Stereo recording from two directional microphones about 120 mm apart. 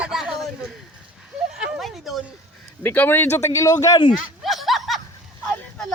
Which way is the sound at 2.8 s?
15° left (ahead or behind).